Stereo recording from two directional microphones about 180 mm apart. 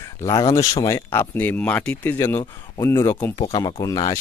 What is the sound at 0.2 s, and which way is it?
Speech, 20° left (ahead or behind).